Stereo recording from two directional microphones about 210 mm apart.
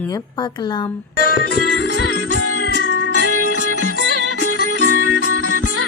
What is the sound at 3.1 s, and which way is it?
Music, 90° left.